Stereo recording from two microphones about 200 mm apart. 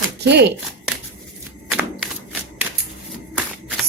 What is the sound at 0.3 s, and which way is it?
Speech, 55° right (ahead or behind).